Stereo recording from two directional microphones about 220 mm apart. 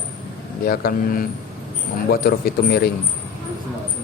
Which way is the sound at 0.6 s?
40° left (ahead or behind).